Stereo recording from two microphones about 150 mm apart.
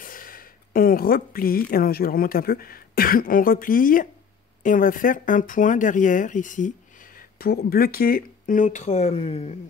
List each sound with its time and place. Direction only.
0.0 s a sound: 70° left (ahead or behind)
1.7 s speech: 85° left; by 6.7 s 60° left (ahead or behind)
7.2 s speech: 85° left; by 9.6 s 45° left (ahead or behind)